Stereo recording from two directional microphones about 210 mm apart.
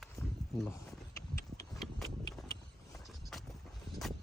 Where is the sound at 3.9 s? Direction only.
Centre (ahead or behind).